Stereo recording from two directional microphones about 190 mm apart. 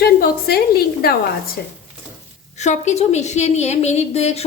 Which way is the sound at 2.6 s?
35° left (ahead or behind).